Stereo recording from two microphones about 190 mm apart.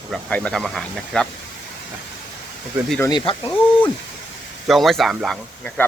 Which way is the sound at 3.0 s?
25° left (ahead or behind).